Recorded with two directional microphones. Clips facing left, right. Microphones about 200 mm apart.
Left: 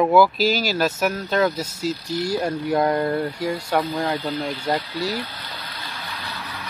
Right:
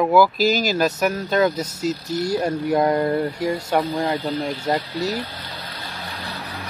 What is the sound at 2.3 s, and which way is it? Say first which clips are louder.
Speech: right 2 dB; 20° right (ahead or behind).